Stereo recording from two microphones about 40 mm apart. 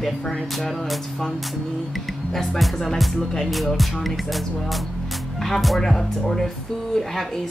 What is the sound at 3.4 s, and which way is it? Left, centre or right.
Music, centre.